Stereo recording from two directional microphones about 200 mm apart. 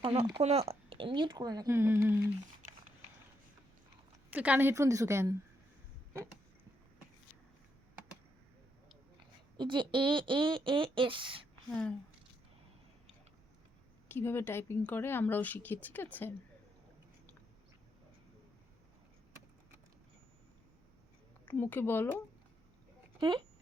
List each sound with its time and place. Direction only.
0.0 s speech: 25° right (ahead or behind); by 2.3 s 10° right (ahead or behind)
4.3 s a woman's voice: 10° right (ahead or behind)
9.6 s speech: 25° right (ahead or behind)
14.1 s speech: 10° left (ahead or behind)
21.4 s speech: 10° left (ahead or behind)